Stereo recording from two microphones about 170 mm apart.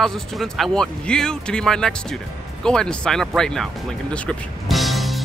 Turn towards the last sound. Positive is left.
turn(degrees=0)  # may be behind; listen again after turning